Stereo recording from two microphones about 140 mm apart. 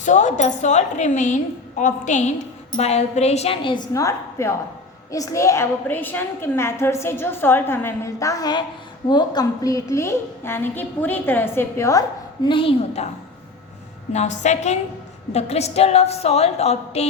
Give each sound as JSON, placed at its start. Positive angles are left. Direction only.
{"t": 0.0, "sound": "a woman's voice", "side_deg": 60}
{"t": 3.9, "sound": "a woman's voice", "side_deg": 20}
{"t": 14.1, "sound": "a woman's voice", "side_deg": 55}